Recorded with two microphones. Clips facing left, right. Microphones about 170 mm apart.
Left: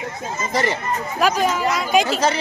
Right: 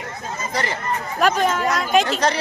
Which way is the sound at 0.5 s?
20° left (ahead or behind).